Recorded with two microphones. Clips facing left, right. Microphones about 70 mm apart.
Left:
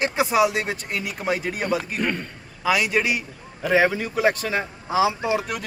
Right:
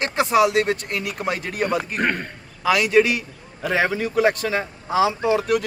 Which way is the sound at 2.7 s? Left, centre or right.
Centre.